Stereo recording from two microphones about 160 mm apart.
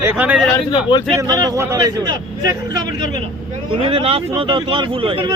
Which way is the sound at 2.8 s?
55° left (ahead or behind).